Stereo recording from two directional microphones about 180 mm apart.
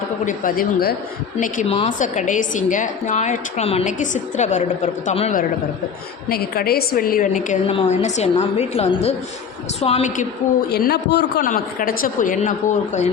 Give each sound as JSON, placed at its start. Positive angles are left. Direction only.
{"t": 0.3, "sound": "a woman's voice", "side_deg": 50}
{"t": 6.2, "sound": "a woman's voice", "side_deg": 60}
{"t": 7.7, "sound": "a woman's voice", "side_deg": 35}
{"t": 10.7, "sound": "a man's voice", "side_deg": 60}
{"t": 11.4, "sound": "a woman's voice", "side_deg": 50}